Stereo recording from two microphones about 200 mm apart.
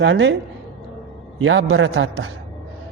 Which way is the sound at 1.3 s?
80° right.